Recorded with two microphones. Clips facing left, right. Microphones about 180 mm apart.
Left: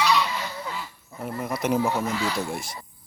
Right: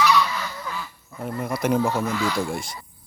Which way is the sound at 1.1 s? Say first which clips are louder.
Right 2 dB; 5° left (ahead or behind).